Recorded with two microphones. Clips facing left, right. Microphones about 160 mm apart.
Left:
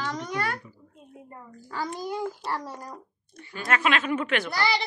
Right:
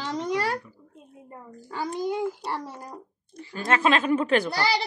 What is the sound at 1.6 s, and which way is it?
A child's voice, 20° right (ahead or behind).